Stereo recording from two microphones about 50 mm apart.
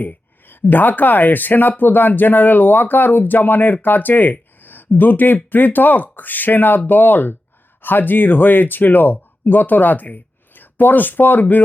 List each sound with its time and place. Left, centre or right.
0.0 s speech: left